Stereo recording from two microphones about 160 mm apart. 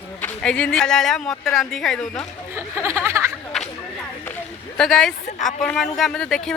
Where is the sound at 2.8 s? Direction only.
15° right (ahead or behind).